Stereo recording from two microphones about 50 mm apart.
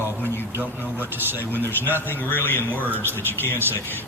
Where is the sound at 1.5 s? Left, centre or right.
Left.